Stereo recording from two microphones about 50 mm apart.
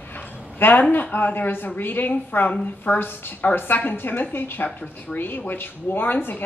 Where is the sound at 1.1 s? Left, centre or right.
Left.